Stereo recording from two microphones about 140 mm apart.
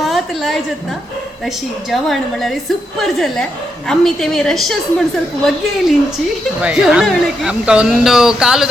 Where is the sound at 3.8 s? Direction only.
5° left (ahead or behind).